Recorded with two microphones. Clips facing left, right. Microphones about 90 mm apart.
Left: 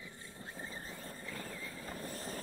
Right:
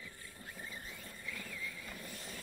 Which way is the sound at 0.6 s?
35° left (ahead or behind).